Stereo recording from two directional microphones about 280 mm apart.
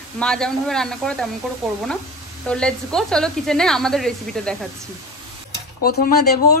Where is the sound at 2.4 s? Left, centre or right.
Centre.